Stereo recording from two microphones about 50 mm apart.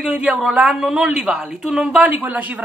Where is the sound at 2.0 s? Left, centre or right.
Right.